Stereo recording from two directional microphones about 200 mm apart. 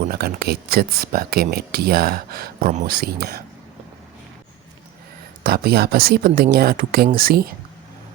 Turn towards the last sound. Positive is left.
turn(degrees=-45)  # may be behind; listen again after turning